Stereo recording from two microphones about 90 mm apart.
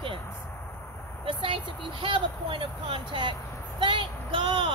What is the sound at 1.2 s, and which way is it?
Speech, 70° right (ahead or behind).